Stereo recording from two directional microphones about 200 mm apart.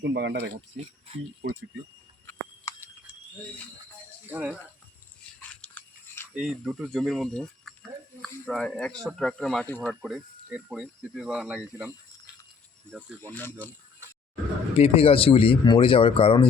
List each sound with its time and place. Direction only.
0.0 s speech: 60° right (ahead or behind)
0.8 s speech: 35° right (ahead or behind)
1.4 s speech: 60° right (ahead or behind)
2.2 s a sound: 10° left (ahead or behind)
4.3 s speech: 10° right (ahead or behind)
5.4 s a sound: 5° left (ahead or behind)
6.3 s speech: 5° right (ahead or behind)
12.9 s speech: 5° right (ahead or behind)
13.3 s speech: 10° left (ahead or behind)
14.8 s speech: 30° left (ahead or behind)